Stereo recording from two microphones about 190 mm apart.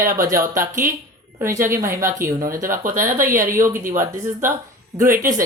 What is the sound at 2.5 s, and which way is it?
Speech, 45° right (ahead or behind).